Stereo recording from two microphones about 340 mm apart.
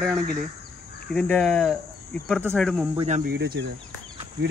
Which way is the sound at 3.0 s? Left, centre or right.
Centre.